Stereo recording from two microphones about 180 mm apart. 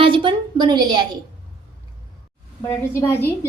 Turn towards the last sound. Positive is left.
turn(degrees=15)  # may be behind; listen again after turning